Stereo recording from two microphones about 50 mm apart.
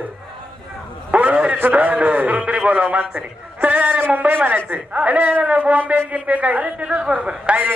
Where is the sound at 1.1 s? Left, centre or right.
Right.